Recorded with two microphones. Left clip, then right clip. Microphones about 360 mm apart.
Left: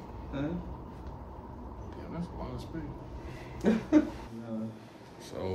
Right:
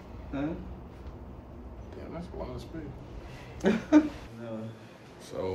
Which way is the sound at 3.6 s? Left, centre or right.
Right.